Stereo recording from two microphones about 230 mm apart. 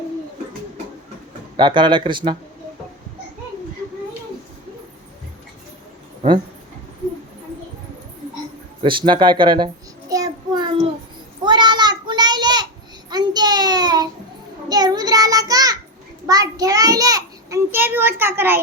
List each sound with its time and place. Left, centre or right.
1.5 s speech: centre
8.8 s speech: right
10.1 s child singing: centre